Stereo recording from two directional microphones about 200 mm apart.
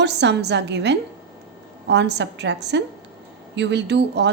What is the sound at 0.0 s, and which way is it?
Speech, 60° right (ahead or behind).